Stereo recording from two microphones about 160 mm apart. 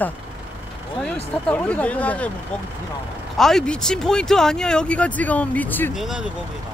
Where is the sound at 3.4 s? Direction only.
Centre (ahead or behind).